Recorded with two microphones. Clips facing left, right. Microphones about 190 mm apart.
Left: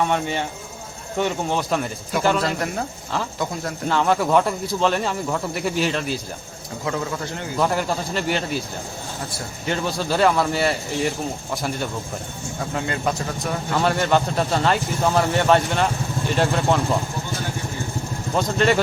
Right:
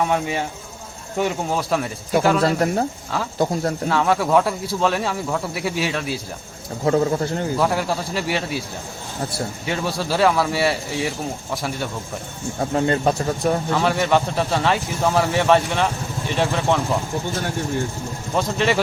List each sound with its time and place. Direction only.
0.0 s speech: 5° right (ahead or behind)
2.4 s speech: 30° right (ahead or behind)
3.8 s speech: centre (ahead or behind)
6.8 s speech: 35° right (ahead or behind)
7.6 s speech: centre (ahead or behind)
9.6 s speech: centre (ahead or behind)
12.7 s speech: 35° right (ahead or behind)
13.7 s speech: centre (ahead or behind)
18.3 s speech: centre (ahead or behind)